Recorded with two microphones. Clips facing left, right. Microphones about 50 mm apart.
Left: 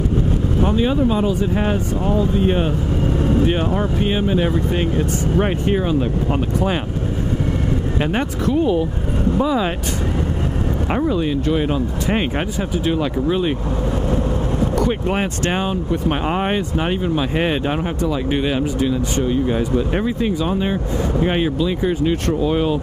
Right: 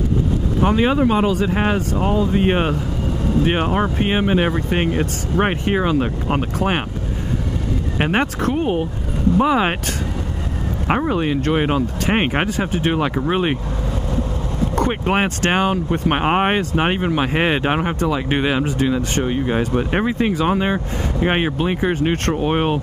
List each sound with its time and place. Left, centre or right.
0.6 s speech: right
8.0 s speech: right
11.1 s speech: right
15.0 s speech: right
15.6 s speech: right